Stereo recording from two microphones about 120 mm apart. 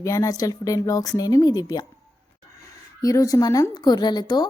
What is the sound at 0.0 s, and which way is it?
A woman's voice, 25° left (ahead or behind).